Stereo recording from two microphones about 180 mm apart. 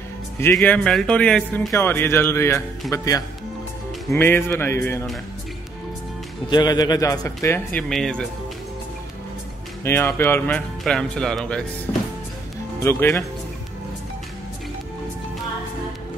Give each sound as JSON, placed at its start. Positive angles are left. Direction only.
{"t": 0.4, "sound": "a man's voice", "side_deg": 10}
{"t": 6.5, "sound": "a man's voice", "side_deg": 20}
{"t": 9.8, "sound": "speech", "side_deg": 15}
{"t": 12.8, "sound": "speech", "side_deg": 15}